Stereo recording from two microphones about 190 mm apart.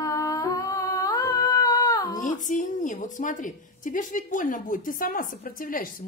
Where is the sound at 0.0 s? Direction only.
15° left (ahead or behind).